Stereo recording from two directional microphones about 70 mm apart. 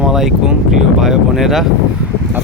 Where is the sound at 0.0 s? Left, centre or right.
Centre.